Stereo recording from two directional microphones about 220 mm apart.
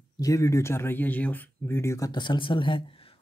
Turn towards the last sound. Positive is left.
turn(degrees=25)  # may be behind; listen again after turning